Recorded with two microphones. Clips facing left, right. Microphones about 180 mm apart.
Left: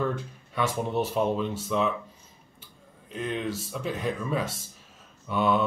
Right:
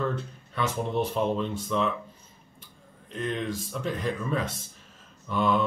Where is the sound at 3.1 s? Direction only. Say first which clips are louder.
Even; 5° left (ahead or behind).